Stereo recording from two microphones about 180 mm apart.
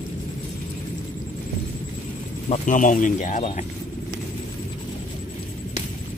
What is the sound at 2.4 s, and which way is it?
Speech, 45° left (ahead or behind).